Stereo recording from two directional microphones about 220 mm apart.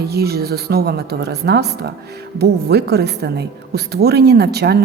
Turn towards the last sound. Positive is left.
turn(degrees=-50)  # may be behind; listen again after turning